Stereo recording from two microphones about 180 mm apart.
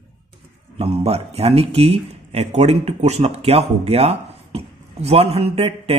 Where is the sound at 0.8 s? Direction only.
35° right (ahead or behind).